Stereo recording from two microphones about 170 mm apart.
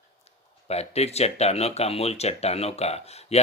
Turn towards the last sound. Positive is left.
turn(degrees=40)  # may be behind; listen again after turning